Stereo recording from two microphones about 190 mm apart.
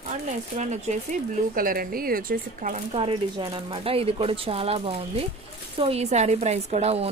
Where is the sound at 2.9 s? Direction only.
30° right (ahead or behind).